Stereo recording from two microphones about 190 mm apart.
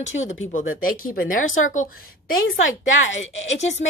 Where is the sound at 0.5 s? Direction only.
45° left (ahead or behind).